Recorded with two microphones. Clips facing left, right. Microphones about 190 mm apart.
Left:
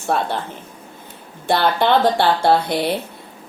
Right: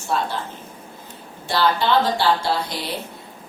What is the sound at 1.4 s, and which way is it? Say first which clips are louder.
Speech: left 3 dB; 55° left (ahead or behind).